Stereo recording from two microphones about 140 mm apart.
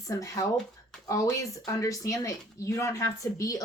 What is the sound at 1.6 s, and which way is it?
Speech, 25° left (ahead or behind).